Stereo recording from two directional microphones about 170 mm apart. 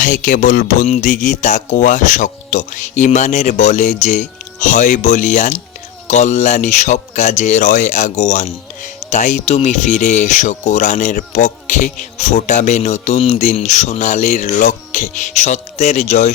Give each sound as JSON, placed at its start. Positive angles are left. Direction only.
{"t": 0.0, "sound": "speech", "side_deg": 50}